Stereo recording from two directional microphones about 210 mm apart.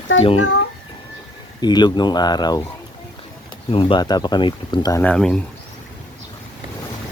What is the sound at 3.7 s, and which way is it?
Speech, 25° left (ahead or behind).